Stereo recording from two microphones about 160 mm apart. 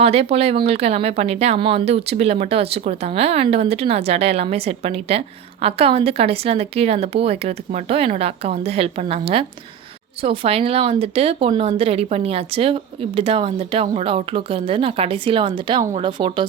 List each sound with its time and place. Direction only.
0.0 s speech: 40° right (ahead or behind)